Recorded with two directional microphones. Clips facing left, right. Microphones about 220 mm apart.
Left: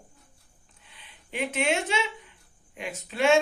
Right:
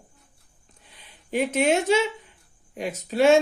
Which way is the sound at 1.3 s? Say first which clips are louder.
Right 6 dB; 40° right (ahead or behind).